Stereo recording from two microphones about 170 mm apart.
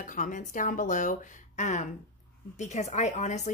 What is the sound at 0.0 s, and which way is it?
Speech, 50° left (ahead or behind).